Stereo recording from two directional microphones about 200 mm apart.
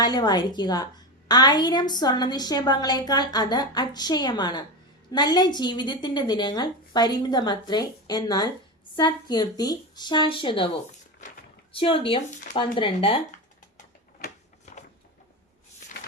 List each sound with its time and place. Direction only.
0.0 s a woman's voice: 20° left (ahead or behind)
11.7 s a woman's voice: 25° left (ahead or behind)
13.7 s a sound: 45° left (ahead or behind)